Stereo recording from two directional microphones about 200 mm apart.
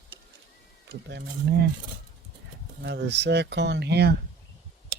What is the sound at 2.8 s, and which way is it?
Speech, 60° right (ahead or behind).